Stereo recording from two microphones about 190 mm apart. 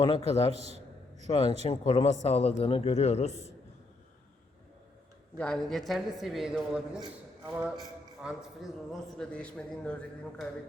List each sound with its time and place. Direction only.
0.0 s a man's voice: 30° left (ahead or behind)
0.5 s a man's voice: 35° right (ahead or behind)
1.3 s a man's voice: 30° left (ahead or behind)
5.4 s a man's voice: 5° left (ahead or behind)